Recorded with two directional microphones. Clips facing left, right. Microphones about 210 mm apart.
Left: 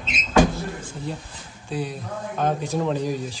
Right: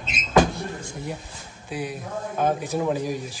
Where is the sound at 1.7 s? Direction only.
10° right (ahead or behind).